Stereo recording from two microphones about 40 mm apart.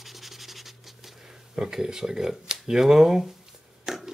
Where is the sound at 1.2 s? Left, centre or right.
Centre.